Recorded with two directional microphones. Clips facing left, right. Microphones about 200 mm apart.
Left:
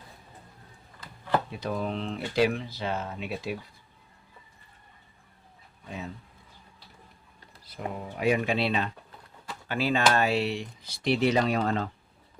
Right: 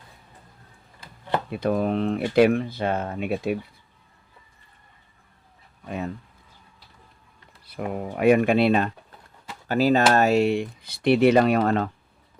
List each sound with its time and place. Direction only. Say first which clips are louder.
1.5 s speech: right 8 dB; 60° right (ahead or behind)
7.7 s speech: right 6 dB; 60° right (ahead or behind)